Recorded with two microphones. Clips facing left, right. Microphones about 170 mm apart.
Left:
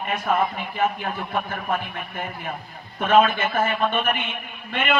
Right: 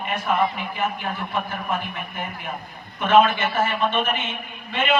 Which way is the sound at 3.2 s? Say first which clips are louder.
Even; 50° left (ahead or behind).